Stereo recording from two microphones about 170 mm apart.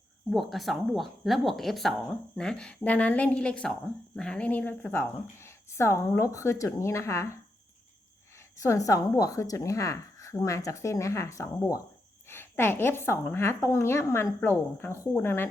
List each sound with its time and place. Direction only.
0.3 s speech: centre (ahead or behind); by 7.3 s 15° left (ahead or behind)
8.4 s speech: 20° left (ahead or behind)